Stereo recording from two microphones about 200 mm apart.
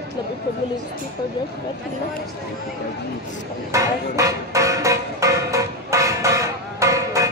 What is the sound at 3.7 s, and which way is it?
Music, 15° right (ahead or behind).